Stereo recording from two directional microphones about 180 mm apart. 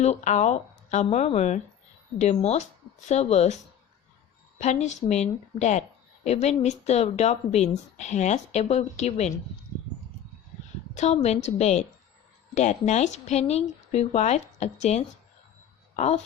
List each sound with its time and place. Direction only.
0.0 s speech: 40° left (ahead or behind)
10.9 s speech: 40° left (ahead or behind)